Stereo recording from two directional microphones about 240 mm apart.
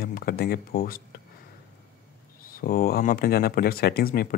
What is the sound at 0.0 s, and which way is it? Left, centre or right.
Speech, left.